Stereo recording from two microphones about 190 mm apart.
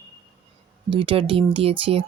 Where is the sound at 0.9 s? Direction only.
25° right (ahead or behind).